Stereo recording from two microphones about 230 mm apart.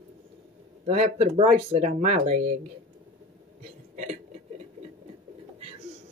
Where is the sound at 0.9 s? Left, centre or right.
Right.